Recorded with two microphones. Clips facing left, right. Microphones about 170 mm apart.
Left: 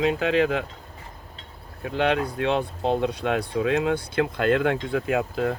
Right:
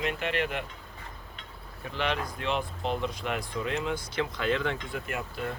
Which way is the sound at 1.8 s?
60° left (ahead or behind).